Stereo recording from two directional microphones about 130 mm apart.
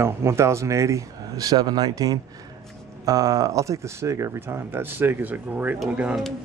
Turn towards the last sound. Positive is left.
turn(degrees=-5)  # may be behind; listen again after turning